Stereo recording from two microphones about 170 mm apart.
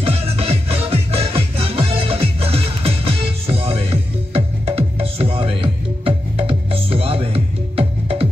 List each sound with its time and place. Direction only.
0.0 s music: 35° right (ahead or behind)